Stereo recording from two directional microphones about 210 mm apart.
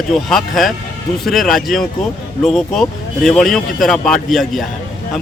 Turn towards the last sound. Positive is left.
turn(degrees=0)  # may be behind; listen again after turning